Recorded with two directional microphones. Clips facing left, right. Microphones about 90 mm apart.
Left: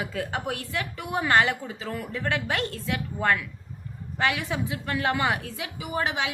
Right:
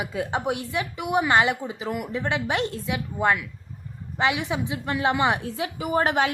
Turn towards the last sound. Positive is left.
turn(degrees=-45)  # may be behind; listen again after turning